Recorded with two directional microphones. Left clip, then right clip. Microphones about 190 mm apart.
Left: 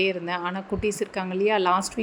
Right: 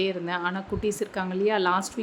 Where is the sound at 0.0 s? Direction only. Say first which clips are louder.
Left 2 dB; 15° left (ahead or behind).